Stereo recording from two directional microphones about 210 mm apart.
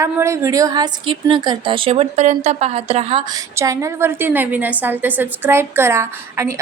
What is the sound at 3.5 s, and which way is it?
Speech, 15° right (ahead or behind).